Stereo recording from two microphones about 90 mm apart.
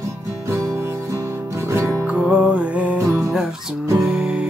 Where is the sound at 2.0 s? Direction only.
15° right (ahead or behind).